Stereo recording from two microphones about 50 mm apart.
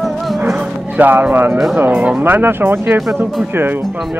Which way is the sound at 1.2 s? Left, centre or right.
Right.